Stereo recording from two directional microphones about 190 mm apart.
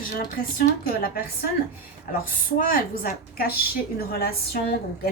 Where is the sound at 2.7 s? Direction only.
50° left (ahead or behind).